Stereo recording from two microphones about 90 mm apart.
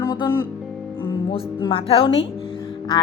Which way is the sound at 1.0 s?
65° left (ahead or behind).